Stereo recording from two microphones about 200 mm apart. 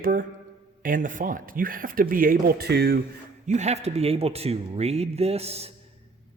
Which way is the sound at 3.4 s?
35° right (ahead or behind).